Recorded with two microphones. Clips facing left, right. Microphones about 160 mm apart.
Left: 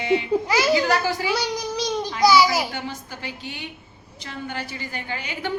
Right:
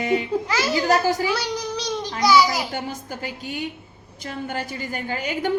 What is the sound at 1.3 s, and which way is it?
Speech, 10° left (ahead or behind).